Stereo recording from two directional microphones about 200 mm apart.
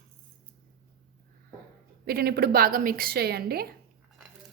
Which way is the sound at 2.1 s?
50° right (ahead or behind).